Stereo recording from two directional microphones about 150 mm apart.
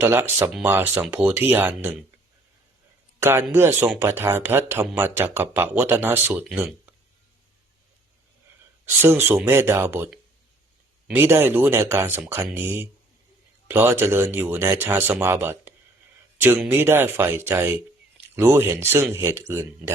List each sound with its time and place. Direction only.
0.0 s speech: 15° right (ahead or behind)
3.2 s a man's voice: 15° right (ahead or behind)
9.0 s speech: 15° right (ahead or behind)
11.1 s speech: 15° right (ahead or behind)